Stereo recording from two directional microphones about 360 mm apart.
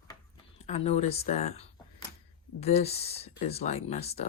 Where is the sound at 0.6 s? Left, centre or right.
Centre.